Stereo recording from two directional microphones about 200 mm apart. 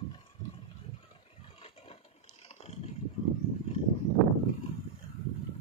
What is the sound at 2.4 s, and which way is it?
Roar, 35° left (ahead or behind).